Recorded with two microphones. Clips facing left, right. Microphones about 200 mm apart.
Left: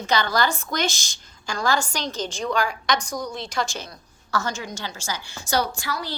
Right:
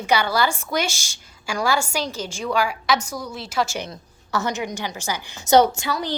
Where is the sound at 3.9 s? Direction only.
20° right (ahead or behind).